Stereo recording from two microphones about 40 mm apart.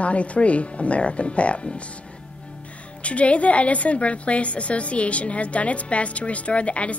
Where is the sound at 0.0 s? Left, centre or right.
Left.